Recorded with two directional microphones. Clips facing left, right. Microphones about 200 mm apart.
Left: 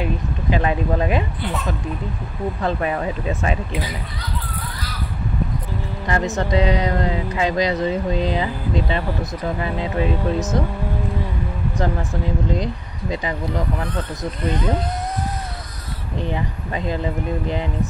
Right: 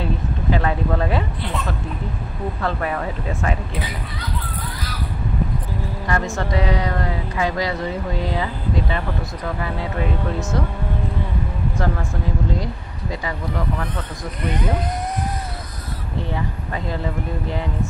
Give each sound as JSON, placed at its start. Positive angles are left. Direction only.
{"t": 0.0, "sound": "speech", "side_deg": 15}
{"t": 2.6, "sound": "speech", "side_deg": 20}
{"t": 6.0, "sound": "speech", "side_deg": 20}
{"t": 11.7, "sound": "speech", "side_deg": 20}
{"t": 16.2, "sound": "speech", "side_deg": 20}